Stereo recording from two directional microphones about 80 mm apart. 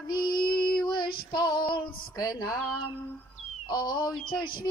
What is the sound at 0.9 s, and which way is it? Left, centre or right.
Child singing, left.